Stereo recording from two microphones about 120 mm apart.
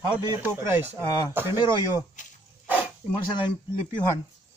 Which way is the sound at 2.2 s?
90° left.